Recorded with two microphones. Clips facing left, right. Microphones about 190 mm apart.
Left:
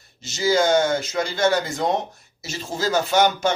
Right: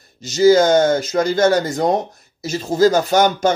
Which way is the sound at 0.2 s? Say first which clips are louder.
Right 8 dB; 40° right (ahead or behind).